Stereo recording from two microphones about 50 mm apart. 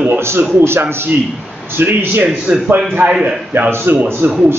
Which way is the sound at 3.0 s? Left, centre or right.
Right.